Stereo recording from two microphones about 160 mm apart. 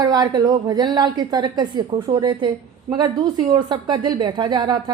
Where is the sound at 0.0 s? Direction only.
25° right (ahead or behind).